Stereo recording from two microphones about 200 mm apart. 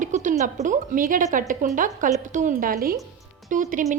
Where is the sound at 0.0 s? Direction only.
40° right (ahead or behind).